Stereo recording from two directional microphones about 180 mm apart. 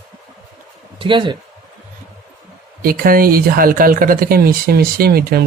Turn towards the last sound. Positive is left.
turn(degrees=-55)  # may be behind; listen again after turning